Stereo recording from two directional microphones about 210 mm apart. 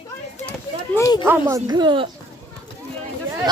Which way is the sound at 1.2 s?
10° right (ahead or behind).